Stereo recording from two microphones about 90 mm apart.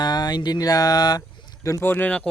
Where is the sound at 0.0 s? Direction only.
50° left (ahead or behind).